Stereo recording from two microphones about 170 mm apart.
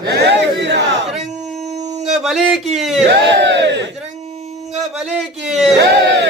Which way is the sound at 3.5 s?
90° right.